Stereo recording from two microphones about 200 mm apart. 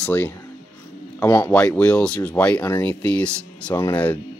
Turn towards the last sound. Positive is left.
turn(degrees=10)  # may be behind; listen again after turning